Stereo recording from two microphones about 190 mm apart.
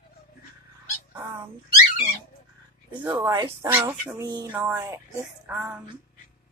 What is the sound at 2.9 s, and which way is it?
Speech, 20° right (ahead or behind).